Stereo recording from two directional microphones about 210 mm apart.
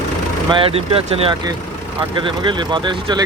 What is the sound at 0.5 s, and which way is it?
Speech, 25° right (ahead or behind).